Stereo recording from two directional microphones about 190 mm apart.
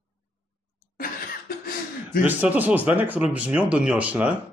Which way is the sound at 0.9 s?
50° left (ahead or behind).